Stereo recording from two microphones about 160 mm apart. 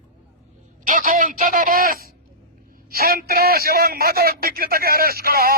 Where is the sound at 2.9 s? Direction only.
70° right (ahead or behind).